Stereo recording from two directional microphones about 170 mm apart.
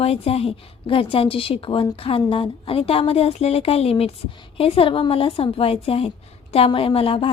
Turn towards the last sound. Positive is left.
turn(degrees=35)  # may be behind; listen again after turning